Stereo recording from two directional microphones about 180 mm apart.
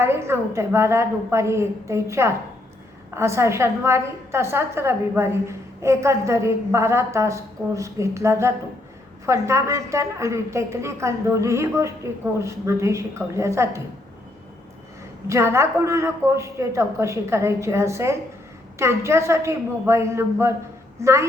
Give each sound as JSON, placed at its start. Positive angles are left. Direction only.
{"t": 0.0, "sound": "a woman's voice", "side_deg": -15}
{"t": 15.3, "sound": "a woman's voice", "side_deg": -15}